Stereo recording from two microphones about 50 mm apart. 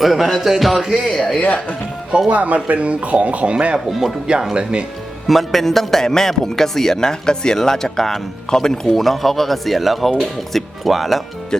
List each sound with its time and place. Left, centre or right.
0.0 s a man's voice: centre
2.3 s speech: right
3.8 s a man's voice: centre
4.5 s speech: centre
5.2 s a man's voice: centre